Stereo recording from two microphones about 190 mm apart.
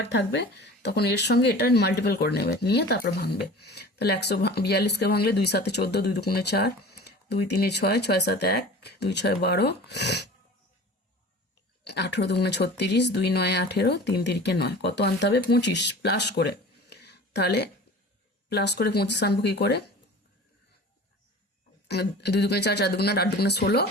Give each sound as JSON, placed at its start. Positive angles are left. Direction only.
{"t": 0.0, "sound": "speech", "side_deg": 65}
{"t": 11.9, "sound": "speech", "side_deg": 60}
{"t": 21.8, "sound": "speech", "side_deg": 60}